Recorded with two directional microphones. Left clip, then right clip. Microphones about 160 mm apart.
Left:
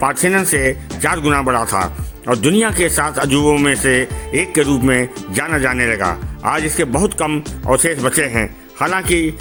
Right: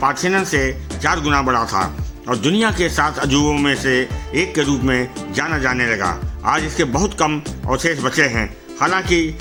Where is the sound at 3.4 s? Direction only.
25° left (ahead or behind).